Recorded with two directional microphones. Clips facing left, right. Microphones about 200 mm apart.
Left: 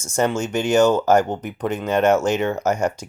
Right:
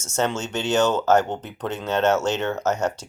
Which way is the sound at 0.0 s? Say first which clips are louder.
Left 4 dB; 10° left (ahead or behind).